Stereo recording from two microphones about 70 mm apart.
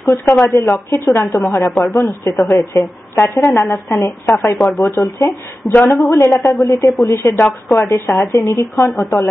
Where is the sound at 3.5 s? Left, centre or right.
Left.